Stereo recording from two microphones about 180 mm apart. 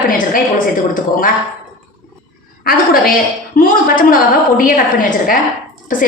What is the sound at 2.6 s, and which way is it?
A woman's voice, 55° left (ahead or behind).